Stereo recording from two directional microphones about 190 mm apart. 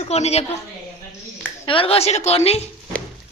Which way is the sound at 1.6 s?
30° left (ahead or behind).